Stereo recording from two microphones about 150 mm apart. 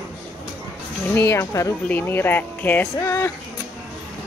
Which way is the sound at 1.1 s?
15° left (ahead or behind).